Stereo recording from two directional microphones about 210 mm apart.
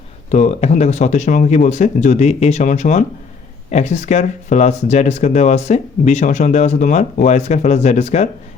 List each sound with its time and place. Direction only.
0.3 s speech: 35° left (ahead or behind)